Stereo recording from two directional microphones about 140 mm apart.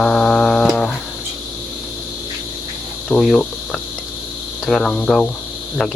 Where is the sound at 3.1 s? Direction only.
5° left (ahead or behind).